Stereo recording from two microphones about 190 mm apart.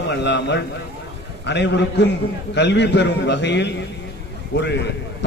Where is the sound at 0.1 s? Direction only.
65° left (ahead or behind).